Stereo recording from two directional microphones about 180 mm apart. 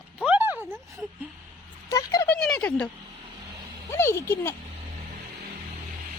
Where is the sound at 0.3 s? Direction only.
10° right (ahead or behind).